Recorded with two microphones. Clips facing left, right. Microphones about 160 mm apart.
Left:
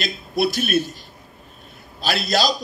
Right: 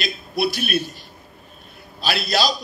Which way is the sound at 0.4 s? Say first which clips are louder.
Left 2 dB; 45° left (ahead or behind).